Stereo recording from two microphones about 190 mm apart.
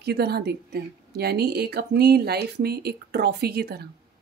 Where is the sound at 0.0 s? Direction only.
60° right (ahead or behind).